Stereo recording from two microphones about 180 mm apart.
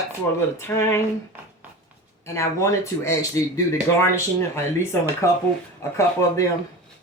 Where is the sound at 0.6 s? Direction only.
15° left (ahead or behind).